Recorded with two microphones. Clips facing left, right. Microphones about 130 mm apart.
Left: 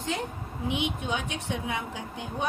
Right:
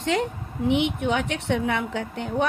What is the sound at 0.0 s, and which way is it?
A woman's voice, 75° right (ahead or behind).